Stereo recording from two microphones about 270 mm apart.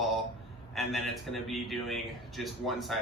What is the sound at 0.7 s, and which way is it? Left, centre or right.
Speech, centre.